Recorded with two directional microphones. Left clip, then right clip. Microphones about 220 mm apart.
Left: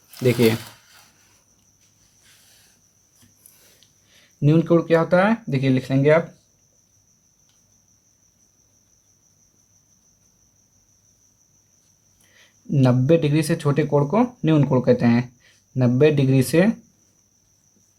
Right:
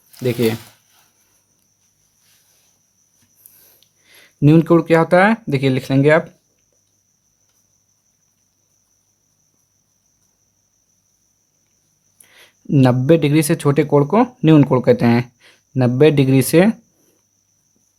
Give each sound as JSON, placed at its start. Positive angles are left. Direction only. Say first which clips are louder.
{"t": 0.2, "sound": "speech", "louder": "even", "side_deg": -15}
{"t": 3.8, "sound": "speech", "louder": "right 6 dB", "side_deg": -35}
{"t": 12.3, "sound": "speech", "louder": "right 9 dB", "side_deg": -35}